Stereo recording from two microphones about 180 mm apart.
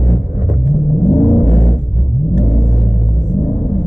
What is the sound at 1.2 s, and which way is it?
Car, 20° right (ahead or behind).